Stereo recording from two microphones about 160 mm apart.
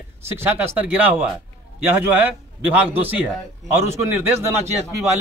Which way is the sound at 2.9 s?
10° right (ahead or behind).